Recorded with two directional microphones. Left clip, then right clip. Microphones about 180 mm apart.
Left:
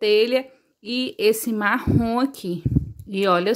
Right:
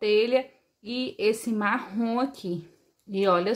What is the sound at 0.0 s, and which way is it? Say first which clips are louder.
Speech: left 4 dB; 40° left (ahead or behind).